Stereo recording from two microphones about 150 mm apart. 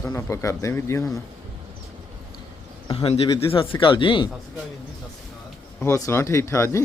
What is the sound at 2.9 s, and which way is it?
Speech, 40° left (ahead or behind).